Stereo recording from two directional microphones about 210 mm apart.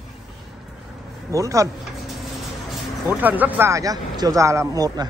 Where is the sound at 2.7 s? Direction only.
10° right (ahead or behind).